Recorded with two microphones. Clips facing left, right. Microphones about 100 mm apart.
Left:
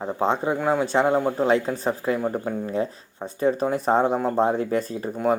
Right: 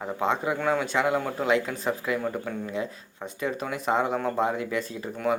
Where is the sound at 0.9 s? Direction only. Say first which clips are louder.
Left 5 dB; 35° left (ahead or behind).